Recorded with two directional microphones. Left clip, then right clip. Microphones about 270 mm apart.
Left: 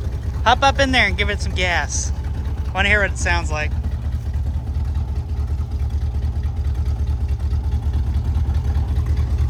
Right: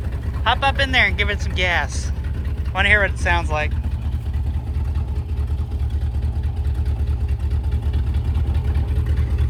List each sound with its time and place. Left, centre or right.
0.4 s speech: left